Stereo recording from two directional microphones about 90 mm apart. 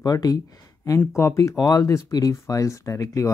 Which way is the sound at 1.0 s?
30° left (ahead or behind).